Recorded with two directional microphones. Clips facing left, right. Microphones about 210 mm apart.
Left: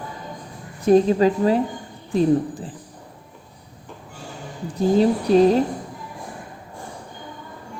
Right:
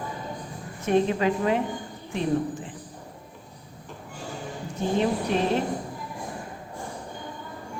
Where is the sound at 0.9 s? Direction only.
35° left (ahead or behind).